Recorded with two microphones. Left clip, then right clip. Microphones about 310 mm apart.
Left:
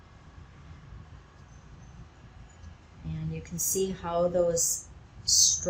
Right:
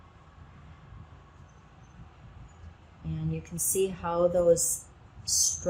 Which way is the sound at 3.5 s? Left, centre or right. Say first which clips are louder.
Right 1 dB; right.